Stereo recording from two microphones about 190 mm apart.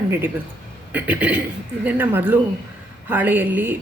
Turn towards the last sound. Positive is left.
turn(degrees=-10)  # may be behind; listen again after turning